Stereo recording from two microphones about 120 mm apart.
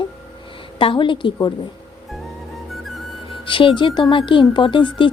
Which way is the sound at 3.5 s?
45° left (ahead or behind).